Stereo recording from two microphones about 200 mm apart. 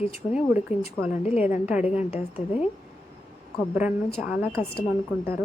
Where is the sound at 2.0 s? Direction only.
30° left (ahead or behind).